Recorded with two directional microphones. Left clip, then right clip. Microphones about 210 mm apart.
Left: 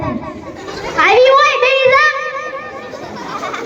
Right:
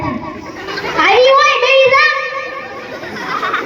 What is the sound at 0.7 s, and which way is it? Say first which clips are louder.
Children playing: right 4 dB; 55° left (ahead or behind).